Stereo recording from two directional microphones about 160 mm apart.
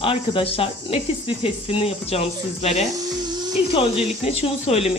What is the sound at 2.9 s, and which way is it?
Hiss, 25° right (ahead or behind).